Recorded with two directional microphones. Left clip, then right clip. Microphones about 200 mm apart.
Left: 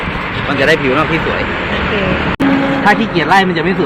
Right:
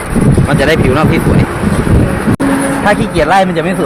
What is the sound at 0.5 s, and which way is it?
Speech, 60° right (ahead or behind).